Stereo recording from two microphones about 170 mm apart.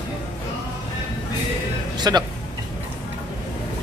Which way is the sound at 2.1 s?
20° right (ahead or behind).